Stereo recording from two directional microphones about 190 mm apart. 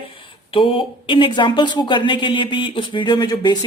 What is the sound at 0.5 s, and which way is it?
A woman's voice, 25° left (ahead or behind).